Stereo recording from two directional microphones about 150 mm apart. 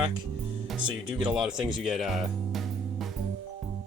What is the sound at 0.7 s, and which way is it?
Speech, 5° right (ahead or behind).